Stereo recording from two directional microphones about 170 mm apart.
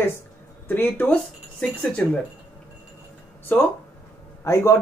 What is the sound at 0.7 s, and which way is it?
Speech, 10° left (ahead or behind).